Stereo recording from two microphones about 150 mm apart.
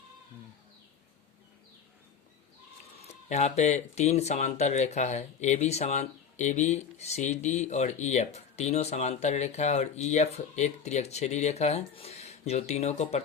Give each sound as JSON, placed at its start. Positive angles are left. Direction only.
{"t": 3.1, "sound": "speech", "side_deg": 50}